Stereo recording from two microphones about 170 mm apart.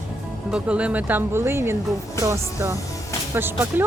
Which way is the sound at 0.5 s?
5° right (ahead or behind).